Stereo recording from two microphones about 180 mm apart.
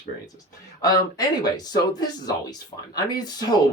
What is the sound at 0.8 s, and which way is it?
Speech, 20° left (ahead or behind).